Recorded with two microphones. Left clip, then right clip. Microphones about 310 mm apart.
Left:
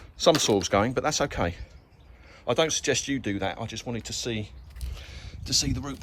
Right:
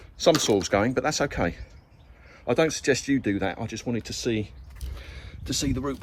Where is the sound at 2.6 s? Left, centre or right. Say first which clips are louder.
Right 2 dB; left.